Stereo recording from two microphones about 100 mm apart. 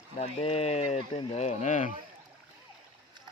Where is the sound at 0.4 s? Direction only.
90° left.